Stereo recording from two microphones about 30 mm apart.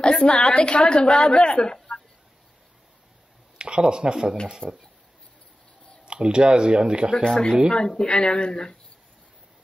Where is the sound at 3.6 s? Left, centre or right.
Right.